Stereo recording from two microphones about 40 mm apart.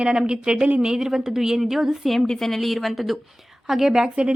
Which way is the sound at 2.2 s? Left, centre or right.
Centre.